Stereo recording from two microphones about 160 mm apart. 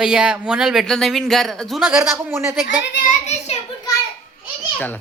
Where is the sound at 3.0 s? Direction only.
45° left (ahead or behind).